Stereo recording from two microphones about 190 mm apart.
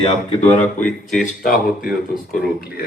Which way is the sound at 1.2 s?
45° left (ahead or behind).